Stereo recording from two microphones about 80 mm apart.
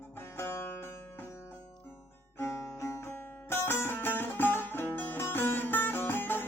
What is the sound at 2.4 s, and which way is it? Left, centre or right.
Music, left.